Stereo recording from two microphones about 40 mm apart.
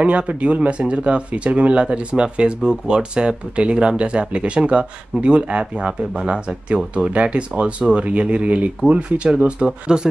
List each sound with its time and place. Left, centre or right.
0.0 s speech: right